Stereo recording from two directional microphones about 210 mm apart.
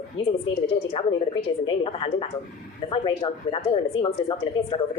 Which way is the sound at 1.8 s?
25° left (ahead or behind).